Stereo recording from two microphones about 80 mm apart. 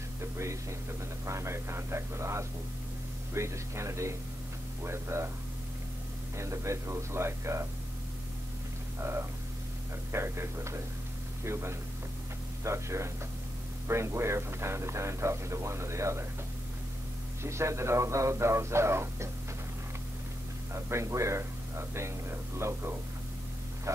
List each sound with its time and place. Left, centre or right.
0.2 s a sound: right
1.2 s speech: right
6.3 s speech: right
9.0 s speech: right
17.4 s speech: right
20.7 s speech: right